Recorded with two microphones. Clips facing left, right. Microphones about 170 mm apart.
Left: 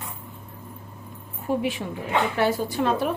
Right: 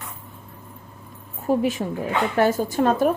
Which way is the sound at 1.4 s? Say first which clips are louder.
Right 4 dB; 40° right (ahead or behind).